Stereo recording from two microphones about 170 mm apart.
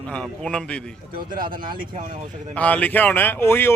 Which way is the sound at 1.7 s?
55° right (ahead or behind).